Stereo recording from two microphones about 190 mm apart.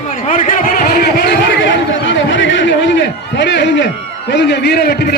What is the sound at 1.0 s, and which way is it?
Chatter, 60° left (ahead or behind).